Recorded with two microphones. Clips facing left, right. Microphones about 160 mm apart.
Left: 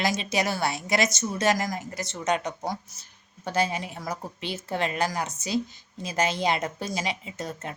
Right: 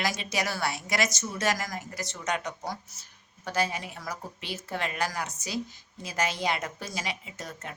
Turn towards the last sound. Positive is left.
turn(degrees=25)  # may be behind; listen again after turning